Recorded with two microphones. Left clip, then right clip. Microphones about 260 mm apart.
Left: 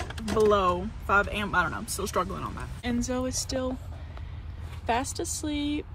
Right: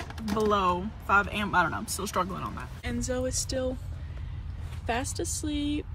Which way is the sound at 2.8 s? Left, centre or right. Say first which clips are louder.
Left 1 dB; left.